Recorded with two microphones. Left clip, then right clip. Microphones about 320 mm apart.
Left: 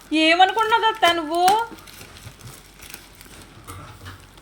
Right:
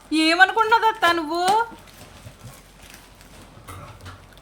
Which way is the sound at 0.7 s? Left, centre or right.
Right.